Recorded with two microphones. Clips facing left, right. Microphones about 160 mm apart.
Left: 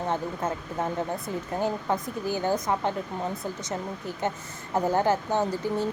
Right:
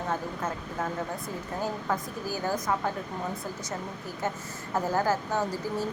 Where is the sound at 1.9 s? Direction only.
20° left (ahead or behind).